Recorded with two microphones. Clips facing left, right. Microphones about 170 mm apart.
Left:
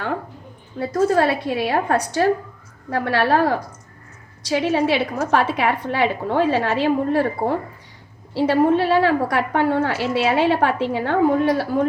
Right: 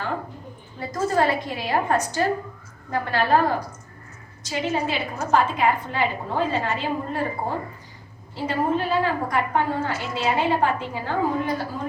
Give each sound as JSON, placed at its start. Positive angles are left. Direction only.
{"t": 0.8, "sound": "a woman's voice", "side_deg": 65}